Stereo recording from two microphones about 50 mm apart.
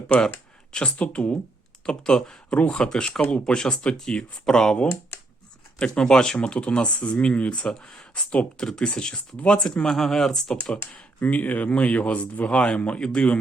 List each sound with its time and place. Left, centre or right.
0.7 s speech: left
1.9 s speech: centre
5.8 s speech: centre
9.9 s speech: centre
11.2 s speech: left